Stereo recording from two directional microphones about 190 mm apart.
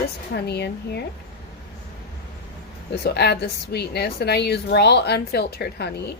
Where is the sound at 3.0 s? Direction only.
60° left (ahead or behind).